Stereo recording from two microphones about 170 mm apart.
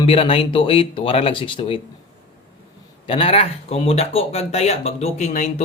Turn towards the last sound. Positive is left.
turn(degrees=40)  # may be behind; listen again after turning